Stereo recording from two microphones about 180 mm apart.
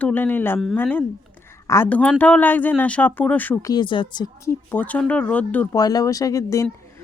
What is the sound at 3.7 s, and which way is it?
Speech, 25° left (ahead or behind).